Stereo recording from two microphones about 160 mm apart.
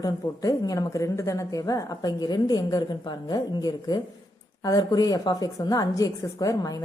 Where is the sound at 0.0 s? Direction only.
25° left (ahead or behind).